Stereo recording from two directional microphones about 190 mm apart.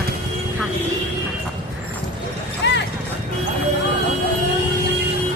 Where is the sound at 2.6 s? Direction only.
65° left (ahead or behind).